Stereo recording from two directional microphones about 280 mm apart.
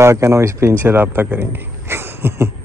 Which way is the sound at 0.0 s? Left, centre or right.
Centre.